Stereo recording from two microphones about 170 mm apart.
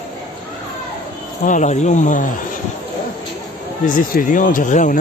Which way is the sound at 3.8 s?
55° left (ahead or behind).